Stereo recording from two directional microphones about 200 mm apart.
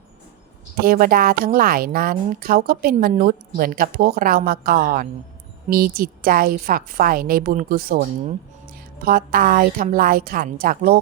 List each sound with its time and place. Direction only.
0.8 s a woman's voice: 45° right (ahead or behind)
9.0 s a woman's voice: 45° right (ahead or behind)